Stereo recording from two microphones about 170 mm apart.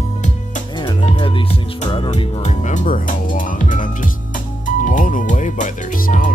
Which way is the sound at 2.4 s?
45° left (ahead or behind).